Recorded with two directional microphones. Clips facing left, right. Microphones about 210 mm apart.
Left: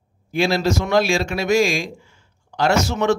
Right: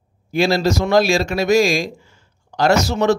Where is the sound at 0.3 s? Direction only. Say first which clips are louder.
Right 2 dB; 40° right (ahead or behind).